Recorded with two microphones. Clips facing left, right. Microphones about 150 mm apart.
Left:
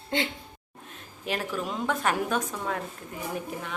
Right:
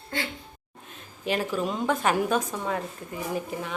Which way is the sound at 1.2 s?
Centre (ahead or behind).